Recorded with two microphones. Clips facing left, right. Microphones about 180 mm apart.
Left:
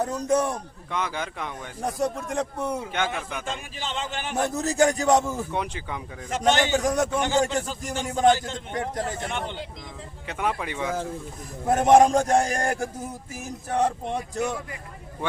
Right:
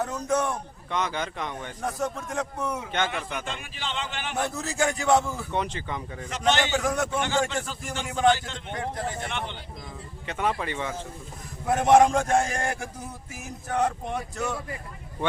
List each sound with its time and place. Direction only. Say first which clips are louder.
0.0 s a man's voice: left 3 dB; 35° left (ahead or behind)
0.9 s speech: right 1 dB; 5° left (ahead or behind)
2.0 s a man's voice: left 5 dB; 35° left (ahead or behind)
2.9 s speech: even; 5° left (ahead or behind)
3.4 s a man's voice: left 2 dB; 45° left (ahead or behind)
5.5 s speech: even; 10° left (ahead or behind)
6.3 s a man's voice: left 3 dB; 45° left (ahead or behind)
10.2 s speech: even; 5° left (ahead or behind)
11.6 s a man's voice: left 2 dB; 40° left (ahead or behind)